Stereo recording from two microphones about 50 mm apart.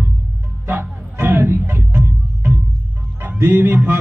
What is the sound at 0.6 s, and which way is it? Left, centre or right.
Music, right.